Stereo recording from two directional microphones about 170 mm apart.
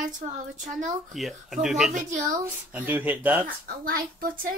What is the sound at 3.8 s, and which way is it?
Speech, 55° right (ahead or behind).